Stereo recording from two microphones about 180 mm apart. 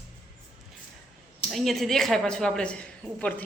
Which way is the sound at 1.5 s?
Centre (ahead or behind).